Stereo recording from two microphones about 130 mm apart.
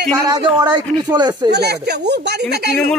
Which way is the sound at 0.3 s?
35° right (ahead or behind).